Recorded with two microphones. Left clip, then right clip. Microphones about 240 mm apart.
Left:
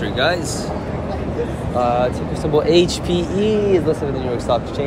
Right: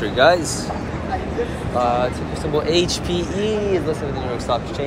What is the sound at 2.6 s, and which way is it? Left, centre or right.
Speech, left.